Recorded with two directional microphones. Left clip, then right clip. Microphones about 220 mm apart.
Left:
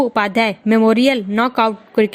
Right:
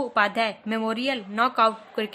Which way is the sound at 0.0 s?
35° left (ahead or behind).